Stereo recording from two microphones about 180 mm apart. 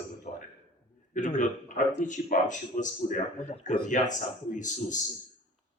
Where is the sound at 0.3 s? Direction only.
45° left (ahead or behind).